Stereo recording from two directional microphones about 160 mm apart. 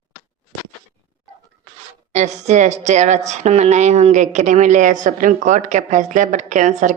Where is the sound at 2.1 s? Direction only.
45° right (ahead or behind).